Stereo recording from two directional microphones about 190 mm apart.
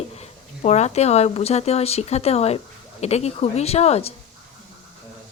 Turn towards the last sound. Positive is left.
turn(degrees=35)  # may be behind; listen again after turning